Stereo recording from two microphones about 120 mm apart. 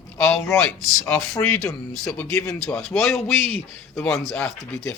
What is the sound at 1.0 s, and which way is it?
Speech, 25° left (ahead or behind).